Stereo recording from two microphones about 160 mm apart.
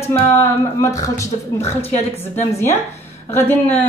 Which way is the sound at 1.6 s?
40° left (ahead or behind).